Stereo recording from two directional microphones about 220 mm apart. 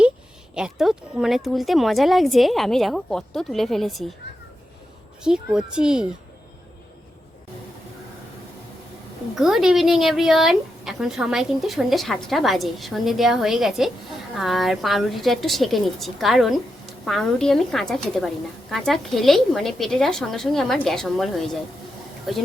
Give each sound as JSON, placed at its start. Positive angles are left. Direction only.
{"t": 0.5, "sound": "speech", "side_deg": -5}
{"t": 5.2, "sound": "speech", "side_deg": -5}
{"t": 9.3, "sound": "speech", "side_deg": 0}